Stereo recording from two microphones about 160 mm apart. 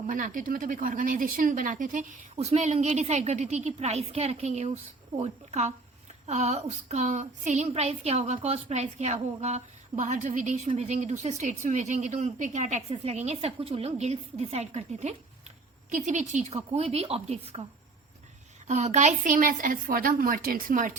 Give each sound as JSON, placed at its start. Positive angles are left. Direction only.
{"t": 0.1, "sound": "a woman's voice", "side_deg": -55}
{"t": 18.7, "sound": "a woman's voice", "side_deg": -45}